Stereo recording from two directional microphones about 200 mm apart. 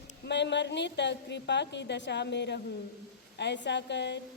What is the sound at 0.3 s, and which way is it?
A woman's voice, 60° left (ahead or behind).